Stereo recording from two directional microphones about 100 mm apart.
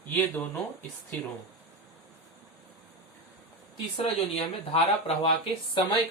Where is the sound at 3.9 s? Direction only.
75° left (ahead or behind).